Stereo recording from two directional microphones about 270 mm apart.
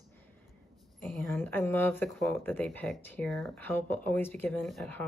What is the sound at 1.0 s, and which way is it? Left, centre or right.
Speech, centre.